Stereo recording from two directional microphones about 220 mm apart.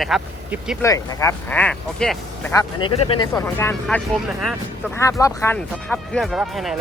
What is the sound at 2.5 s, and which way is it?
Speech, 20° left (ahead or behind).